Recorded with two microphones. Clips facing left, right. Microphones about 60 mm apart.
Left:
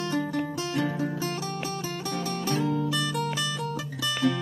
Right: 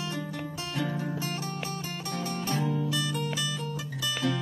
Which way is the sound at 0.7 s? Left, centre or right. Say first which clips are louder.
Left 3 dB; centre.